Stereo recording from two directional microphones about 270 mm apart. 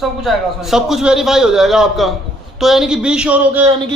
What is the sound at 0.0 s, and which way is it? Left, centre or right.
A man's voice, centre.